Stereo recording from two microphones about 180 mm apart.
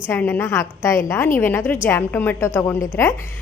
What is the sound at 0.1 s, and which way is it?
A woman's voice, 10° left (ahead or behind).